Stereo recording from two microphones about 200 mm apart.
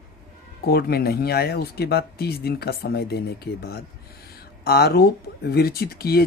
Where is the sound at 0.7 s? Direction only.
50° left (ahead or behind).